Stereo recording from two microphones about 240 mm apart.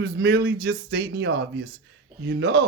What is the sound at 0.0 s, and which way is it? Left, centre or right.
Speech, right.